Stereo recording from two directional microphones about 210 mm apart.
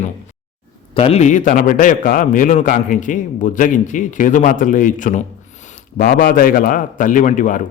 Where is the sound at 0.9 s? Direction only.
30° left (ahead or behind).